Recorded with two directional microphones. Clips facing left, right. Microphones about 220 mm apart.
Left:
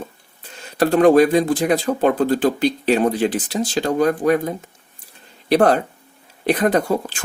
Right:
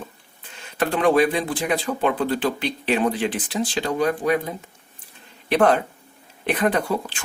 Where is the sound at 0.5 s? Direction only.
40° left (ahead or behind).